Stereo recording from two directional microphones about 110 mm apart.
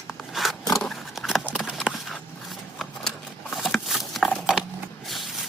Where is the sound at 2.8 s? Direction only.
Centre (ahead or behind).